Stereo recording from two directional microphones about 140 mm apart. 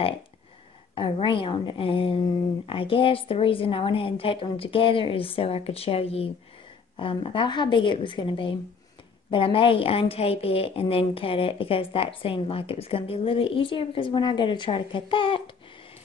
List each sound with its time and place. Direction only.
0.9 s a woman's voice: 40° left (ahead or behind)